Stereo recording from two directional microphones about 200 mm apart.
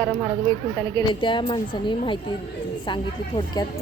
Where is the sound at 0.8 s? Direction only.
20° left (ahead or behind).